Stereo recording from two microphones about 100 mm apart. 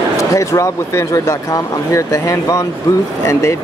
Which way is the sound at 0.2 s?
30° left (ahead or behind).